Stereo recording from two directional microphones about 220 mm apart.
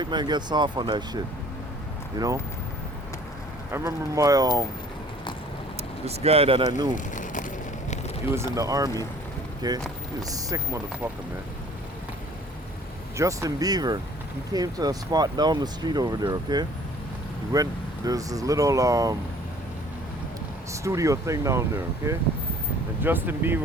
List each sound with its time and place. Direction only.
0.0 s speech: 20° right (ahead or behind)
3.7 s speech: 15° right (ahead or behind)
6.1 s speech: 25° right (ahead or behind)
6.9 s a sound: 35° left (ahead or behind)
8.5 s speech: 15° right (ahead or behind)
13.1 s speech: 15° right (ahead or behind)
20.8 s speech: 15° right (ahead or behind)